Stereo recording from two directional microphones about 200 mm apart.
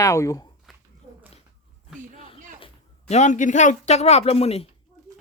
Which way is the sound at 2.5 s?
30° left (ahead or behind).